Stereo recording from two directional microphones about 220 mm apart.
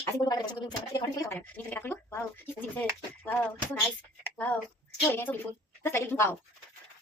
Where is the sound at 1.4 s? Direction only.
5° left (ahead or behind).